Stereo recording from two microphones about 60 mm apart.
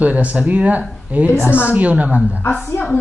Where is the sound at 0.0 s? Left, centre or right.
Right.